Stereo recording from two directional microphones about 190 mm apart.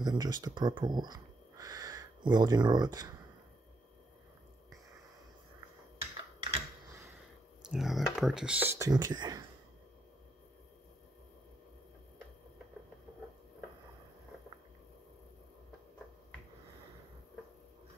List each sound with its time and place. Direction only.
0.0 s speech: 20° right (ahead or behind)
6.5 s computer keyboard: 15° right (ahead or behind)
7.7 s speech: centre (ahead or behind); by 9.4 s 20° right (ahead or behind)